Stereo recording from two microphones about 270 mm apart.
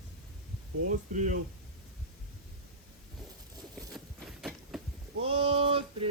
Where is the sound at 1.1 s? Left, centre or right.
Right.